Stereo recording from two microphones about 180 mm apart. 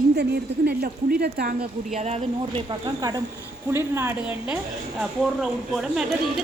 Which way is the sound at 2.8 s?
20° right (ahead or behind).